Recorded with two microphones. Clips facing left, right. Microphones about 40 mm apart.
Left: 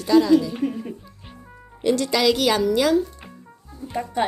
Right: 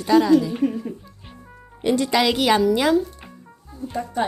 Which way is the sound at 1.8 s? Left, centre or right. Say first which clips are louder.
Even; centre.